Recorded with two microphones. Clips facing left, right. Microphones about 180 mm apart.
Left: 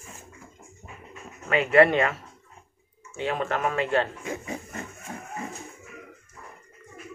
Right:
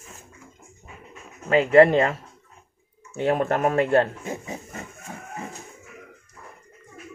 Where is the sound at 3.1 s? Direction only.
45° right (ahead or behind).